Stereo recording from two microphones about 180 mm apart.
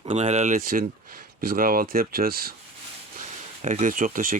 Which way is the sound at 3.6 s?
45° right (ahead or behind).